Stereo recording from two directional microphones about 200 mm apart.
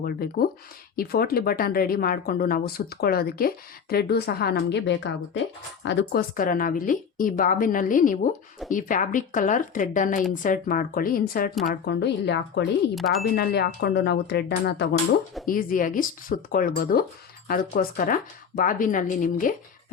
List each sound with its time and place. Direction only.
0.0 s speech: 50° left (ahead or behind)
11.7 s speech: 60° left (ahead or behind)
12.9 s speech: centre (ahead or behind)
13.3 s speech: 50° left (ahead or behind)
15.4 s speech: 45° left (ahead or behind)